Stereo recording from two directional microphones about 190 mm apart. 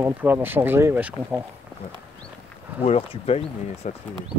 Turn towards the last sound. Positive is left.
turn(degrees=30)  # may be behind; listen again after turning